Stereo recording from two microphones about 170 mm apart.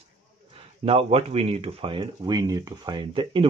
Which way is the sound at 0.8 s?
35° right (ahead or behind).